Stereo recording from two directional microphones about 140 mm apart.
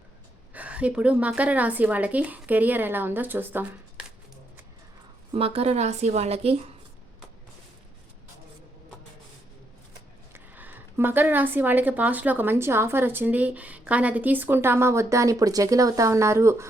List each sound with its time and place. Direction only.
0.5 s speech: 10° right (ahead or behind)
5.3 s a woman's voice: 45° right (ahead or behind)
10.3 s speech: 15° right (ahead or behind)